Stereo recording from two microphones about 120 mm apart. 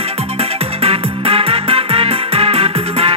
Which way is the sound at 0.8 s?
55° right (ahead or behind).